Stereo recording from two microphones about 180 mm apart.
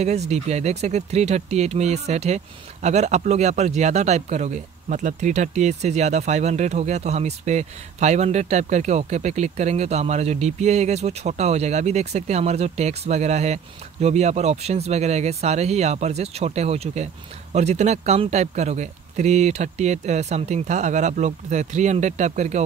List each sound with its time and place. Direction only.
0.0 s speech: 35° right (ahead or behind)